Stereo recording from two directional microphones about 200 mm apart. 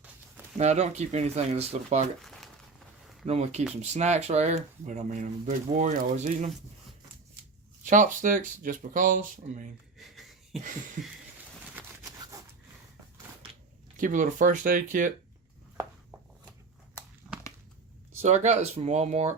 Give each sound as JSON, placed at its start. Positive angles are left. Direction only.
{"t": 0.5, "sound": "speech", "side_deg": -35}
{"t": 2.2, "sound": "crumpling", "side_deg": 0}
{"t": 3.2, "sound": "speech", "side_deg": -30}
{"t": 7.9, "sound": "speech", "side_deg": -40}
{"t": 10.0, "sound": "a sound", "side_deg": 0}
{"t": 11.7, "sound": "a sound", "side_deg": -10}
{"t": 13.9, "sound": "speech", "side_deg": -40}
{"t": 17.2, "sound": "a sound", "side_deg": -5}
{"t": 18.2, "sound": "speech", "side_deg": -35}